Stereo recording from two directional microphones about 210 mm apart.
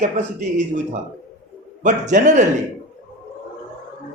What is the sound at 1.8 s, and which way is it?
Speech, 35° right (ahead or behind).